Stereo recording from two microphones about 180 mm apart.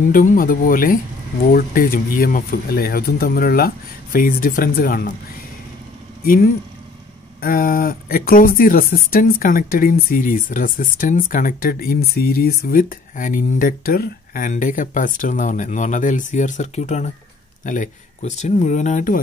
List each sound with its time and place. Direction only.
0.0 s speech: 50° left (ahead or behind)
6.2 s speech: 55° left (ahead or behind)